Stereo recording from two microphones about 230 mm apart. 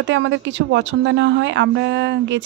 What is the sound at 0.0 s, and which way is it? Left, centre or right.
Speech, right.